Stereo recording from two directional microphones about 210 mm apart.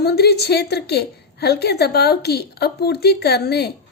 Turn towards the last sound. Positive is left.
turn(degrees=50)  # may be behind; listen again after turning